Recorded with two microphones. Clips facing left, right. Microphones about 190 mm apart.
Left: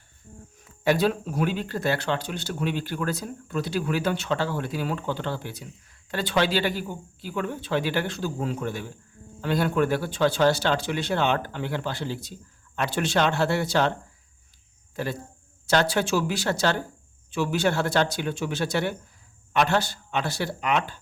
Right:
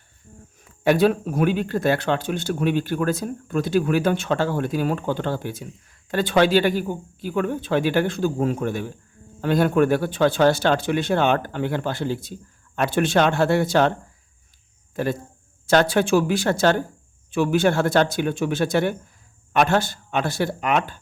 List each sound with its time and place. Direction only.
0.6 s speech: 55° right (ahead or behind)
14.9 s speech: 50° right (ahead or behind)